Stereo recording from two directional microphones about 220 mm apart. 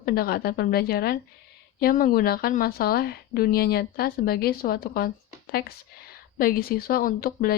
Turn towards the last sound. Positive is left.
turn(degrees=40)  # may be behind; listen again after turning